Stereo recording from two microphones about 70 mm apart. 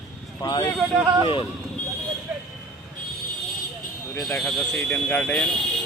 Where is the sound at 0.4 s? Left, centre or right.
Left.